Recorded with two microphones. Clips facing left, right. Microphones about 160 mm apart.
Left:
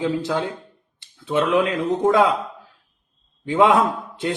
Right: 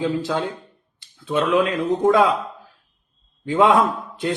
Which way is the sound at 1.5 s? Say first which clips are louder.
Right 1 dB; 20° left (ahead or behind).